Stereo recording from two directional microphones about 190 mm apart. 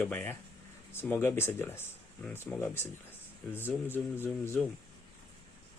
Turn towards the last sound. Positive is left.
turn(degrees=10)  # may be behind; listen again after turning